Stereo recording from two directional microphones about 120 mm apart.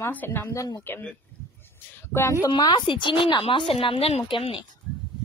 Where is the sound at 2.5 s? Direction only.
40° left (ahead or behind).